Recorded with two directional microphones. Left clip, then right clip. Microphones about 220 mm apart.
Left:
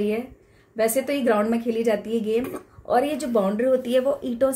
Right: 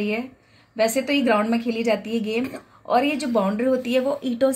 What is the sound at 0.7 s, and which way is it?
Speech, 20° left (ahead or behind).